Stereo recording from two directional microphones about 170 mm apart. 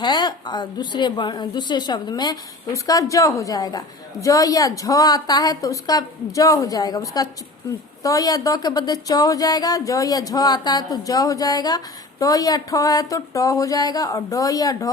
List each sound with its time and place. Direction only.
0.0 s a woman's voice: 25° left (ahead or behind)